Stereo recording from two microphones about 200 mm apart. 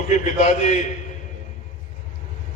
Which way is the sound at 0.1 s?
35° left (ahead or behind).